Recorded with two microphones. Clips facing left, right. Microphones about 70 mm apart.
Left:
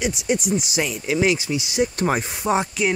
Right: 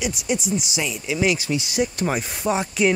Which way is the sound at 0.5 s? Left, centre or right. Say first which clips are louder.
Left 2 dB; left.